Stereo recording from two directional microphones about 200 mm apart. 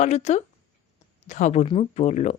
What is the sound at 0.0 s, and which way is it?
Speech, 35° left (ahead or behind).